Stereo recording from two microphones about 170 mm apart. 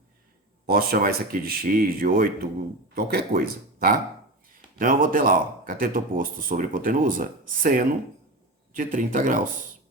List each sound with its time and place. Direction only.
0.7 s speech: 60° right (ahead or behind)